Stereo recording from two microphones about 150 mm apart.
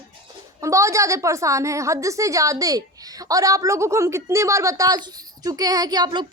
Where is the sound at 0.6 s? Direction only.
20° right (ahead or behind).